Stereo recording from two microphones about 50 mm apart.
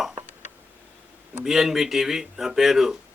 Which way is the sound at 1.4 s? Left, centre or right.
Centre.